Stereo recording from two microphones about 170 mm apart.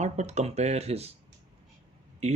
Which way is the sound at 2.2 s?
40° right (ahead or behind).